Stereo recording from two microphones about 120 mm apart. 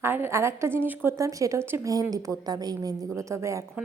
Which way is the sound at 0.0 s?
20° right (ahead or behind).